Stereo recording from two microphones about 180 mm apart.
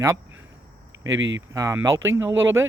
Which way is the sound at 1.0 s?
90° right.